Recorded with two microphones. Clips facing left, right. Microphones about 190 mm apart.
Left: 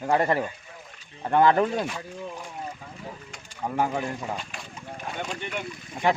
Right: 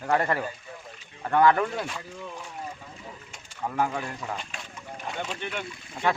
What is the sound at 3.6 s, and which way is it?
Speech, 20° left (ahead or behind).